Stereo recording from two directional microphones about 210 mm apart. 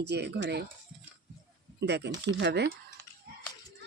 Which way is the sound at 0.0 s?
55° right (ahead or behind).